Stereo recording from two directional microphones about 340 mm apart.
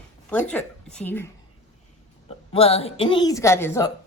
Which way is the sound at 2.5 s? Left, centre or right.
Centre.